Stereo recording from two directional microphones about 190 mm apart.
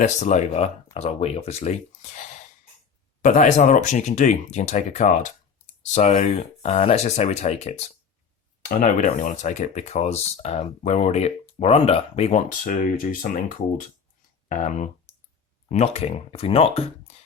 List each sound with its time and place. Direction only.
0.0 s speech: 40° left (ahead or behind)